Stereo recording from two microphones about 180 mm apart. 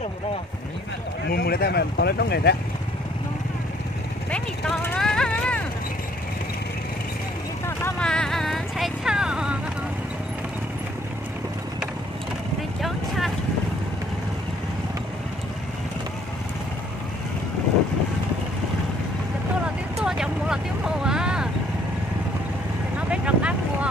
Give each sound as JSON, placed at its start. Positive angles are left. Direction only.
{"t": 1.3, "sound": "speech", "side_deg": 60}
{"t": 4.3, "sound": "speech", "side_deg": 5}
{"t": 7.6, "sound": "vehicle", "side_deg": 10}
{"t": 12.8, "sound": "vehicle", "side_deg": 0}
{"t": 19.6, "sound": "vehicle", "side_deg": -5}
{"t": 22.9, "sound": "vehicle", "side_deg": -5}